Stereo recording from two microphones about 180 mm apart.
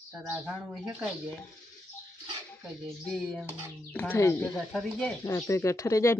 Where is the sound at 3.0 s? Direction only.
5° left (ahead or behind).